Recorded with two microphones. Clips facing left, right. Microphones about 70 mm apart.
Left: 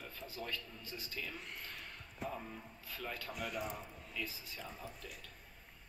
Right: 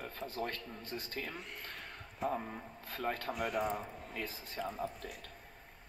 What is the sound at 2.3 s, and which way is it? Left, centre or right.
Speech, right.